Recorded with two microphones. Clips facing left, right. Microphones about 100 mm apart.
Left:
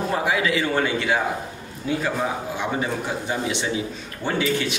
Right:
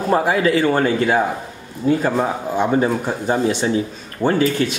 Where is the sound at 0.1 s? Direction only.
40° right (ahead or behind).